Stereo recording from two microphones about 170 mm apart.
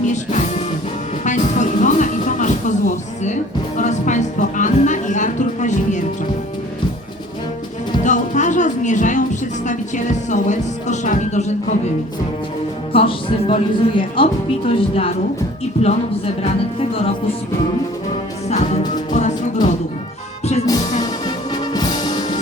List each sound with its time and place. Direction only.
0.1 s speech: 45° left (ahead or behind)
1.2 s music: 45° left (ahead or behind)
3.8 s speech: 45° left (ahead or behind)
8.0 s speech: 45° left (ahead or behind)
12.9 s speech: 30° left (ahead or behind)
19.1 s music: 45° left (ahead or behind)
21.5 s music: 25° left (ahead or behind)